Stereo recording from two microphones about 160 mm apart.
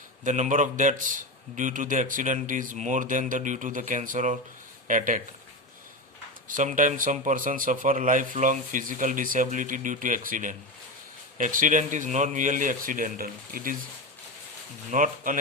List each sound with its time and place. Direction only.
0.3 s a man's voice: 50° right (ahead or behind)
6.5 s a man's voice: 55° right (ahead or behind)
14.8 s a man's voice: 55° right (ahead or behind)